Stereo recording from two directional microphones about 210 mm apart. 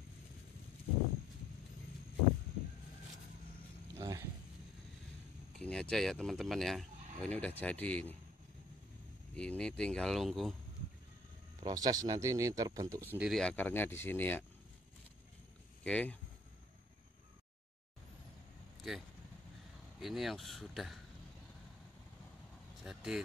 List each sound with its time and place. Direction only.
4.0 s dog: 15° right (ahead or behind)
5.6 s speech: 5° left (ahead or behind)
9.3 s speech: 5° left (ahead or behind)
11.6 s speech: 20° right (ahead or behind); by 14.4 s 10° left (ahead or behind)
15.8 s speech: 5° left (ahead or behind)
18.8 s speech: centre (ahead or behind)
22.8 s speech: 5° right (ahead or behind)